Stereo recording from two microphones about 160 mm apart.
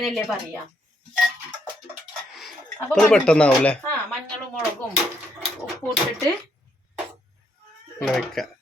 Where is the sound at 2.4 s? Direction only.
Centre (ahead or behind).